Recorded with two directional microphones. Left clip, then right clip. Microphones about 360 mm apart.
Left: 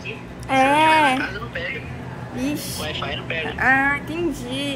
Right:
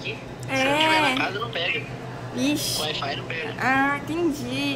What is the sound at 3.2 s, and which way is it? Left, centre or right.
Speech, centre.